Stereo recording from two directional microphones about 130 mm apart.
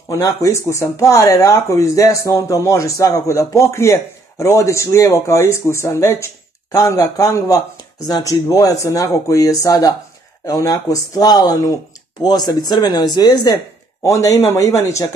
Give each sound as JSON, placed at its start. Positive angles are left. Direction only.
{"t": 0.1, "sound": "speech", "side_deg": 25}